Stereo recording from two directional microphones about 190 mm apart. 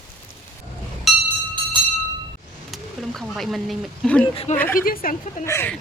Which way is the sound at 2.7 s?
Centre (ahead or behind).